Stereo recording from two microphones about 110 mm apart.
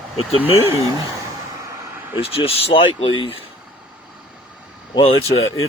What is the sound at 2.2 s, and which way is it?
Speech, 60° left (ahead or behind).